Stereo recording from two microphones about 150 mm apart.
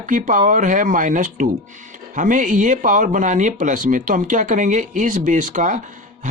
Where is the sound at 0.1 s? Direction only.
60° right (ahead or behind).